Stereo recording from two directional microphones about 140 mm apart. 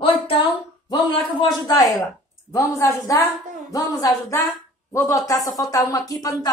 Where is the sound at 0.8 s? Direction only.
30° left (ahead or behind).